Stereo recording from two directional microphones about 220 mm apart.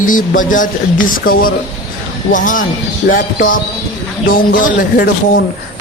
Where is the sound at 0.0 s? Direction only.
35° left (ahead or behind).